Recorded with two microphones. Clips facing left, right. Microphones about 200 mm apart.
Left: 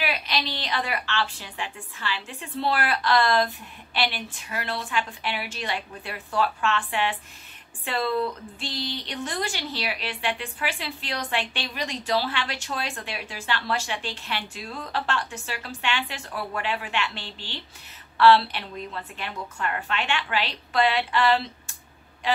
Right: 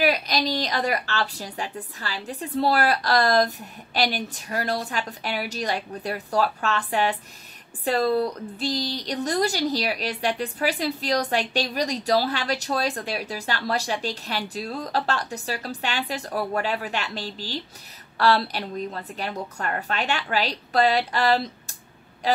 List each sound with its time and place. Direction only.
0.0 s a woman's voice: 40° right (ahead or behind)